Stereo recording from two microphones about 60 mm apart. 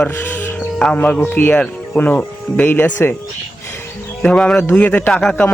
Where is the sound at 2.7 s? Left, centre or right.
Left.